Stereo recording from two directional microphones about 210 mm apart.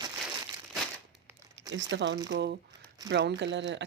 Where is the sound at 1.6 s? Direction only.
65° right (ahead or behind).